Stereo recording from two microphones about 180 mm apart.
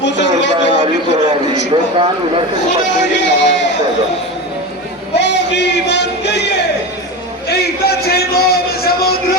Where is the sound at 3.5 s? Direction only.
75° left (ahead or behind).